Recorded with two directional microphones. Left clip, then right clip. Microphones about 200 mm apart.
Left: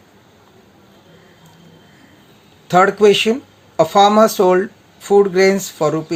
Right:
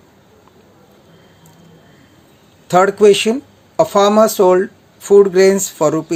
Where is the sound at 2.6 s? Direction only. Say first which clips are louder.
Right 1 dB; 20° right (ahead or behind).